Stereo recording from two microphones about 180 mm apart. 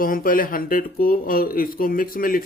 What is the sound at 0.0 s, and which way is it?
Speech, 50° left (ahead or behind).